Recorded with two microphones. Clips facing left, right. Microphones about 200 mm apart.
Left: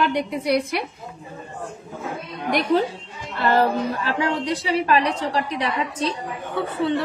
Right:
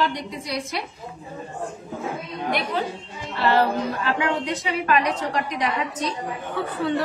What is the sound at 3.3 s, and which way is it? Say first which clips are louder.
Music: left 1 dB; 50° left (ahead or behind).